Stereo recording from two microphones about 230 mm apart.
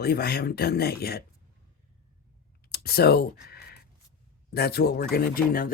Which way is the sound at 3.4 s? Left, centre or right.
Left.